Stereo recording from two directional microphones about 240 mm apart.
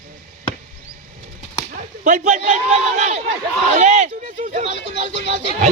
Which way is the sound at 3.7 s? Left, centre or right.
Right.